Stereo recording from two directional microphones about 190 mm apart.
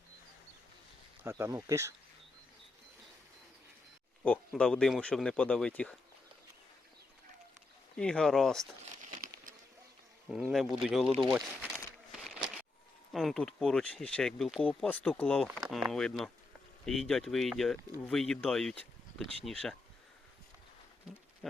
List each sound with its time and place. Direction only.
1.2 s speech: 15° right (ahead or behind)
4.2 s speech: 5° left (ahead or behind)
7.9 s speech: 5° left (ahead or behind)
9.0 s crumpling: 40° right (ahead or behind)
10.2 s speech: centre (ahead or behind)
13.1 s speech: centre (ahead or behind)